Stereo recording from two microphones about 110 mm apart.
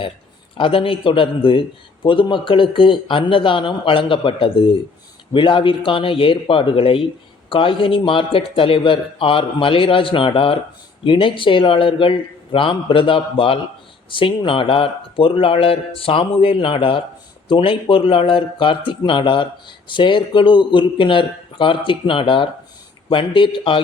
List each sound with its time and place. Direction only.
0.5 s a man's voice: 50° left (ahead or behind)